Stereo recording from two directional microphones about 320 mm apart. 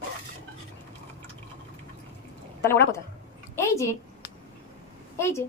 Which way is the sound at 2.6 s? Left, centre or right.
Centre.